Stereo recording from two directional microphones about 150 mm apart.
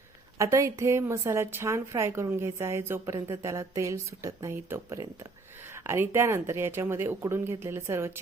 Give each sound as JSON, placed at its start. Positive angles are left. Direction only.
{"t": 0.3, "sound": "speech", "side_deg": -20}